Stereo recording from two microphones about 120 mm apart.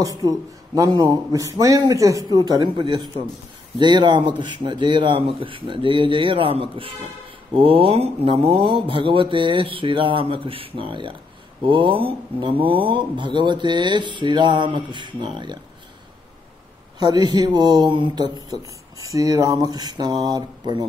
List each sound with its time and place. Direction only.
0.0 s a man's voice: 30° right (ahead or behind)
17.0 s speech: 35° right (ahead or behind)